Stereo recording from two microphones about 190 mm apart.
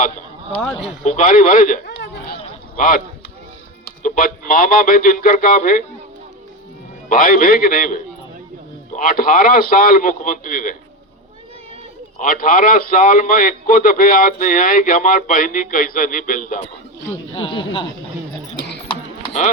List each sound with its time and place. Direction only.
0.6 s speech: 5° left (ahead or behind)
1.0 s a man's voice: 45° left (ahead or behind)
2.0 s a sound: 65° left (ahead or behind)
2.7 s speech: 45° left (ahead or behind)
4.0 s a man's voice: 45° left (ahead or behind)
7.1 s a man's voice: 50° left (ahead or behind)
12.2 s a man's voice: 45° left (ahead or behind)
17.3 s speech: 25° left (ahead or behind)
19.2 s clip-clop: 35° left (ahead or behind)